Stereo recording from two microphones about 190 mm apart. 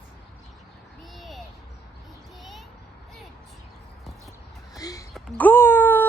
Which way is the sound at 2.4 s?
Centre (ahead or behind).